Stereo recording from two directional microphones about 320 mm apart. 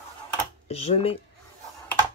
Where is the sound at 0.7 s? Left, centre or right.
Centre.